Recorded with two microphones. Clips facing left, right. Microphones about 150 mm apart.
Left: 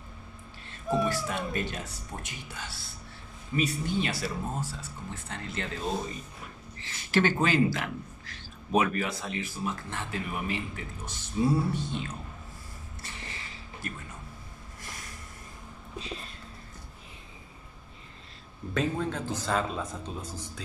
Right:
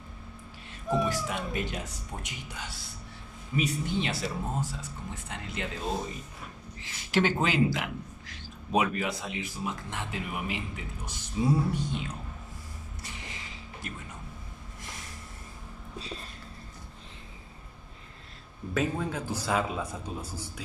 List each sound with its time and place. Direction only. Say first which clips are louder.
0.9 s speech: left 1 dB; 15° right (ahead or behind)
6.8 s speech: left 1 dB; 15° right (ahead or behind)
13.0 s a sound: left 1 dB; 15° right (ahead or behind)
18.7 s speech: even; 10° right (ahead or behind)